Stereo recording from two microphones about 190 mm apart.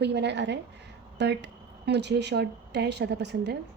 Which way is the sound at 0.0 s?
65° right (ahead or behind).